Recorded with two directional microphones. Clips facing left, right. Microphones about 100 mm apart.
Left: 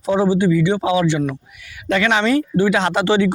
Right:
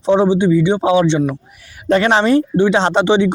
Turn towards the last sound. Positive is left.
turn(degrees=-20)  # may be behind; listen again after turning